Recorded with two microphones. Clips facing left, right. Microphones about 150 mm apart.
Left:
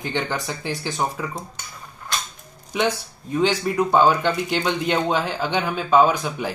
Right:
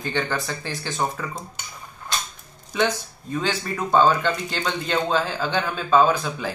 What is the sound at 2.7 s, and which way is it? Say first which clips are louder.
Speech: even; 15° left (ahead or behind).